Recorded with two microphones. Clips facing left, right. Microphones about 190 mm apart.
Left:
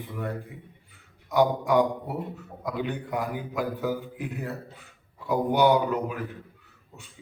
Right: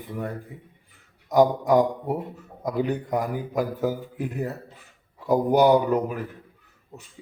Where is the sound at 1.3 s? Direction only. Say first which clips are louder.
Right 4 dB; 40° right (ahead or behind).